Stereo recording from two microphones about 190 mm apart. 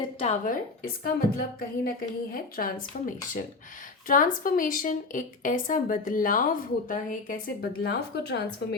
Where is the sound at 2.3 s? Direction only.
50° left (ahead or behind).